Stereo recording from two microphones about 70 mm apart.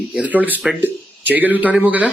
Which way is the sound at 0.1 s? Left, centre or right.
Centre.